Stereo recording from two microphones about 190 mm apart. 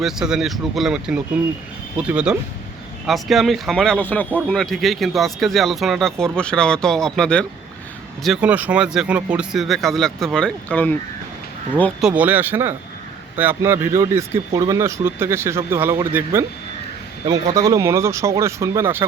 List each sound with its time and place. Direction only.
0.0 s speech: 5° right (ahead or behind)
17.5 s speech: 15° right (ahead or behind)